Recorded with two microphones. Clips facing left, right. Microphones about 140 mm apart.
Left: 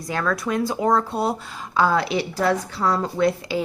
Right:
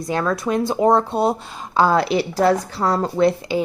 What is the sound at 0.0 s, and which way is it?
Speech, 25° right (ahead or behind).